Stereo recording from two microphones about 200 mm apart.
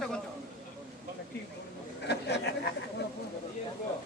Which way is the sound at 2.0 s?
55° left (ahead or behind).